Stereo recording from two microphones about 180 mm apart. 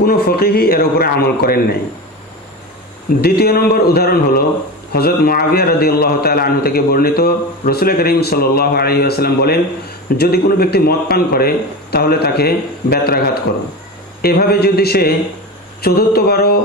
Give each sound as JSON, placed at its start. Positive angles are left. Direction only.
{"t": 0.0, "sound": "a man's voice", "side_deg": 60}
{"t": 3.2, "sound": "a man's voice", "side_deg": 60}